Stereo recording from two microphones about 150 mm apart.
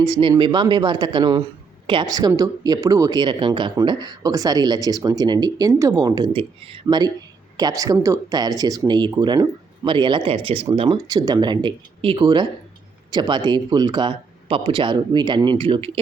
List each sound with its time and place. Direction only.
0.0 s speech: 30° right (ahead or behind)
6.8 s speech: 25° right (ahead or behind)